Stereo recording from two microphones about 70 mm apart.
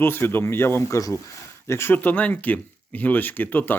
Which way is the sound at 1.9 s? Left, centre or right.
Left.